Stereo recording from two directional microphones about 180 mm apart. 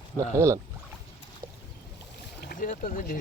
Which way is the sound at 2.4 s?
55° left (ahead or behind).